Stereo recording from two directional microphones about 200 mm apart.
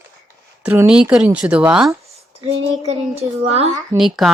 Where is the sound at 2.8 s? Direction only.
30° right (ahead or behind).